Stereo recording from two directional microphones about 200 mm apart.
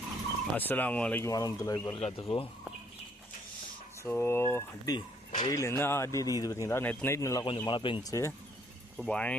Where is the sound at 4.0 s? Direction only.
10° left (ahead or behind).